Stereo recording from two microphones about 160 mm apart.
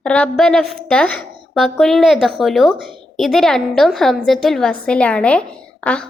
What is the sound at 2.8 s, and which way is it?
Speech, 30° right (ahead or behind).